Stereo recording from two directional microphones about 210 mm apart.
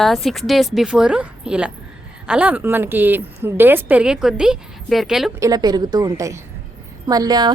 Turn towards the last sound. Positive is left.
turn(degrees=-20)  # may be behind; listen again after turning